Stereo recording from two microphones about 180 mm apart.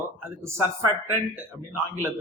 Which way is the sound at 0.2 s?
10° right (ahead or behind).